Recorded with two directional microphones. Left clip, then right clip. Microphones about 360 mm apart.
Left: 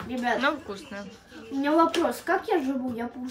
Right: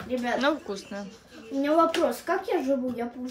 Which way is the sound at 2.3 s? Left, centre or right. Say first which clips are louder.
Even; centre.